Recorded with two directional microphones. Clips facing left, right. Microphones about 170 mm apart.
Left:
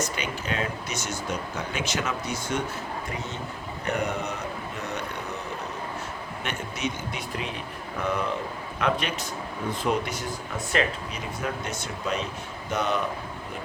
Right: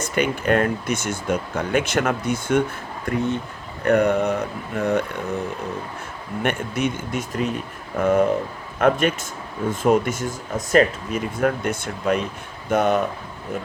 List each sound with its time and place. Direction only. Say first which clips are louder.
0.0 s speech: right 8 dB; 55° right (ahead or behind)
3.8 s speech: right 11 dB; 60° right (ahead or behind)
6.4 s speech: right 9 dB; 55° right (ahead or behind)